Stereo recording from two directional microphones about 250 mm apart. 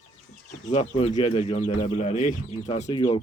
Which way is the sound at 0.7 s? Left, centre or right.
Left.